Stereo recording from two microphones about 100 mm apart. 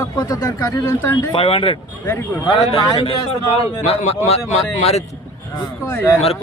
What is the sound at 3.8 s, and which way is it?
Speech, 90° left.